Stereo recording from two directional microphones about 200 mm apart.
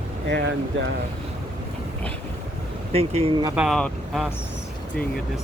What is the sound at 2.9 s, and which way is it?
Speech, 30° right (ahead or behind).